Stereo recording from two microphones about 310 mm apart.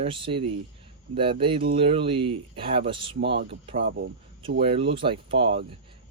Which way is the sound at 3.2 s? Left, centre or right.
Right.